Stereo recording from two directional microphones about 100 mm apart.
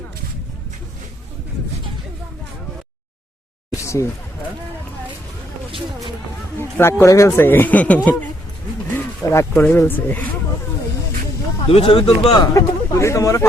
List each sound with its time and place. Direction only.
3.8 s a sound: 30° left (ahead or behind)
6.6 s speech: 25° left (ahead or behind)
9.3 s speech: 25° left (ahead or behind)
11.6 s speech: 70° left (ahead or behind)
12.0 s a man's voice: 45° left (ahead or behind)
12.5 s speech: 30° left (ahead or behind)